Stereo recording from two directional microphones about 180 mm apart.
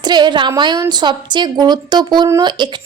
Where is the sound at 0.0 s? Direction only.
25° right (ahead or behind).